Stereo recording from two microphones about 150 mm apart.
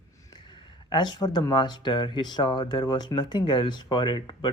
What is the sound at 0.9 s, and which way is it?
Speech, 30° left (ahead or behind).